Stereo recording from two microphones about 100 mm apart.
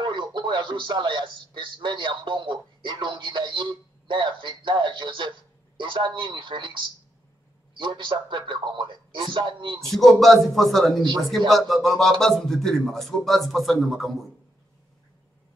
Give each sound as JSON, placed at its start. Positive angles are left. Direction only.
{"t": 0.0, "sound": "a man's voice", "side_deg": -50}
{"t": 7.7, "sound": "a man's voice", "side_deg": -55}
{"t": 9.8, "sound": "speech", "side_deg": 0}